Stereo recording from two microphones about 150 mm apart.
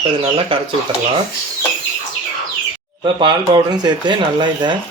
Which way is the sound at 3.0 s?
30° right (ahead or behind).